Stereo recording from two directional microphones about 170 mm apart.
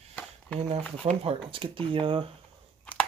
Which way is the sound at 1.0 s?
25° right (ahead or behind).